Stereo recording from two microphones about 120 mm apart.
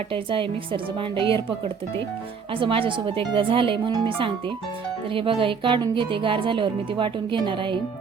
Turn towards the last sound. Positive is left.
turn(degrees=-45)  # may be behind; listen again after turning